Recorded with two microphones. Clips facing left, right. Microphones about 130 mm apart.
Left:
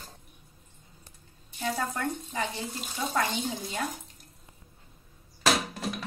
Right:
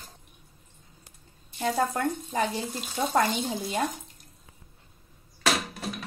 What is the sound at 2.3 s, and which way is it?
A woman's voice, 45° right (ahead or behind).